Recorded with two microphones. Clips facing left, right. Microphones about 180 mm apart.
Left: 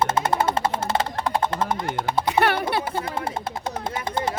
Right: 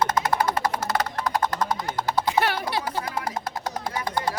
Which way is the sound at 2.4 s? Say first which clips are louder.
Left 3 dB; 60° left (ahead or behind).